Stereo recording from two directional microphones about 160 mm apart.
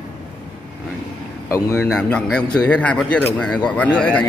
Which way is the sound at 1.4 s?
15° left (ahead or behind).